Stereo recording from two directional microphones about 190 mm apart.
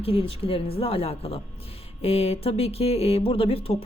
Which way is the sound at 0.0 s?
30° left (ahead or behind).